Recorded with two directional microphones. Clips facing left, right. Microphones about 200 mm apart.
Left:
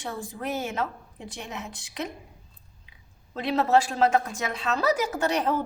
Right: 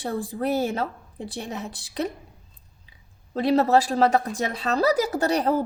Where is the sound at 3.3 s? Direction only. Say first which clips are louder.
Right 3 dB; 35° right (ahead or behind).